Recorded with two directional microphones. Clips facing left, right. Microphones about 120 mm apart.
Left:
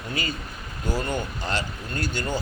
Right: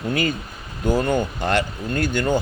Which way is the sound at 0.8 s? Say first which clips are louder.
Right 8 dB; 50° right (ahead or behind).